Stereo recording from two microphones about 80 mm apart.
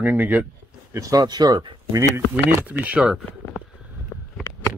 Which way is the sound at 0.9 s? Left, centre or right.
Right.